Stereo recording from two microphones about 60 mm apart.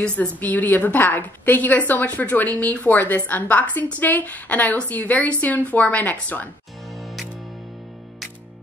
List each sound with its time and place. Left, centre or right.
0.4 s a woman's voice: left
6.9 s music: centre